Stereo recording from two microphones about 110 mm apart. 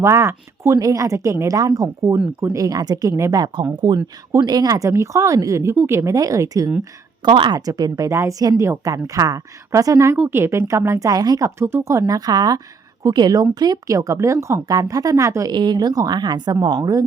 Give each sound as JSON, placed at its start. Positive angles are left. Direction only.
{"t": 0.0, "sound": "speech", "side_deg": -25}
{"t": 7.3, "sound": "speech", "side_deg": -50}
{"t": 7.6, "sound": "speech", "side_deg": -35}
{"t": 15.5, "sound": "speech", "side_deg": -40}